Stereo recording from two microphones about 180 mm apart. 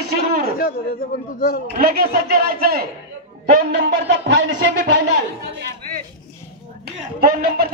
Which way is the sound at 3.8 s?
75° right (ahead or behind).